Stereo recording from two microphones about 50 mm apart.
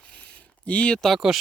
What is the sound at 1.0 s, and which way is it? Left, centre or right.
Speech, centre.